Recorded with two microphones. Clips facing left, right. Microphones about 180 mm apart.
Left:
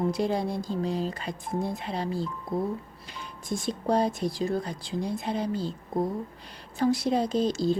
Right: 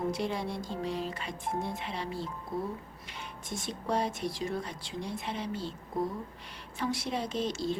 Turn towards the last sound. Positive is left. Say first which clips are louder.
# left 7 dB
turn(degrees=35)  # may be behind; listen again after turning